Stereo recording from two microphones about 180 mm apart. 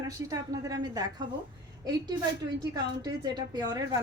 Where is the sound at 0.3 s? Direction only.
20° right (ahead or behind).